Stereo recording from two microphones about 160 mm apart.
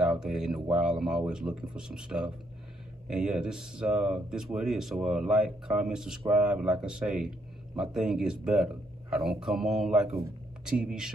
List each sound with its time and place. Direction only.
0.0 s speech: 5° right (ahead or behind)